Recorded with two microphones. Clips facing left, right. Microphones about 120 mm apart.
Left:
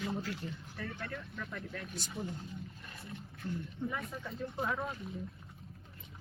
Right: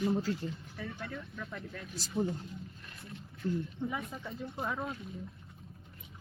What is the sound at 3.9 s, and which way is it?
Speech, 10° right (ahead or behind).